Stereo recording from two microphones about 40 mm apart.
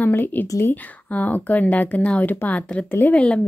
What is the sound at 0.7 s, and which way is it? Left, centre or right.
Speech, left.